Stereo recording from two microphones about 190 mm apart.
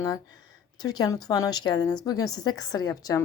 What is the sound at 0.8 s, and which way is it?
A woman's voice, 20° left (ahead or behind).